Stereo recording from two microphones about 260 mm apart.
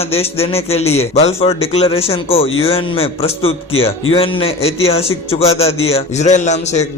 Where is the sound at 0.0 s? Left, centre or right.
Left.